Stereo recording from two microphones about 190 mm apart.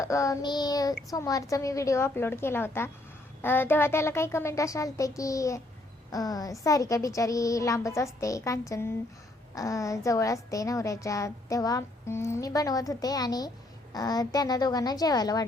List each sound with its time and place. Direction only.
0.0 s a woman's voice: 15° left (ahead or behind)